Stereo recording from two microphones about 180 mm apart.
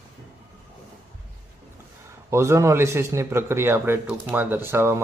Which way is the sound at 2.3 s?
15° right (ahead or behind).